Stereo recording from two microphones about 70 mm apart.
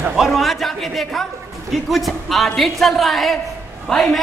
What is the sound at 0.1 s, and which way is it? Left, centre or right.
A man's voice, centre.